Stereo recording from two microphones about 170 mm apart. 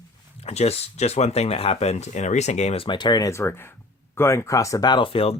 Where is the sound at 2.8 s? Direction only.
25° left (ahead or behind).